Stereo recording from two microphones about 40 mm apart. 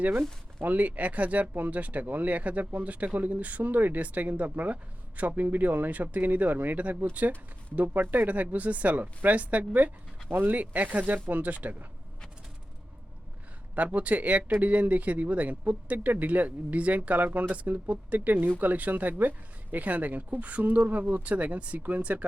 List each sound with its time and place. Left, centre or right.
0.6 s speech: right
10.2 s speech: right
13.7 s speech: right